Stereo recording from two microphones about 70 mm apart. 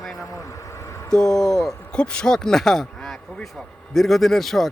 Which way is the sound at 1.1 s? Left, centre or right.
Centre.